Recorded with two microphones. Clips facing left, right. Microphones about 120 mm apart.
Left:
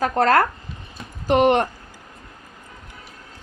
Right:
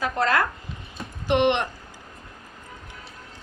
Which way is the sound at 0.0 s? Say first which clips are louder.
Left 6 dB; 45° left (ahead or behind).